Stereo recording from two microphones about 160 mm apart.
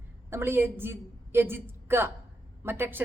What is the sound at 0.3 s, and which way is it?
A woman's voice, 15° right (ahead or behind).